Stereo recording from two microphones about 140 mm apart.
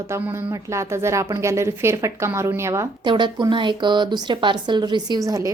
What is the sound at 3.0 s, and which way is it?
A woman's voice, 35° right (ahead or behind).